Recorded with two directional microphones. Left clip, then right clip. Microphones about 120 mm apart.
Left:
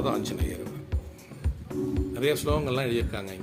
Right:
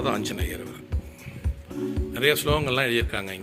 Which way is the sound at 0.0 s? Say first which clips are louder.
Right 2 dB; 15° left (ahead or behind).